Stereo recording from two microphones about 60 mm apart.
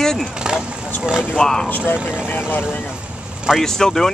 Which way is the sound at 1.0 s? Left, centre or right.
Centre.